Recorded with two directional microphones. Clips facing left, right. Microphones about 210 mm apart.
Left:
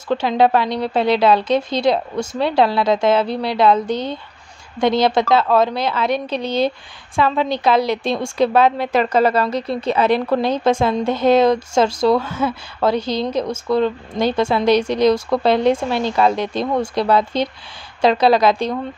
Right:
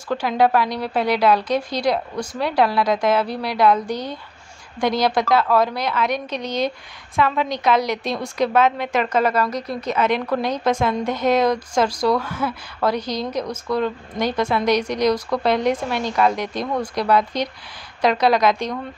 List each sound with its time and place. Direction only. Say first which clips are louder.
0.1 s a woman's voice: left 3 dB; 25° left (ahead or behind)